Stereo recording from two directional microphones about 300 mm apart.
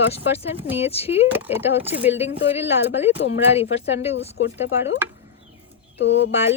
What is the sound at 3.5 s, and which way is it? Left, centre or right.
Speech, centre.